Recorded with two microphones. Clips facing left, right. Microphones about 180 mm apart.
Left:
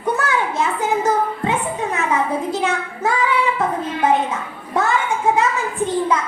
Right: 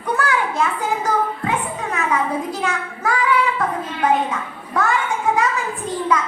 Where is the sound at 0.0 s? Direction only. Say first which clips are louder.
Left 1 dB; 25° left (ahead or behind).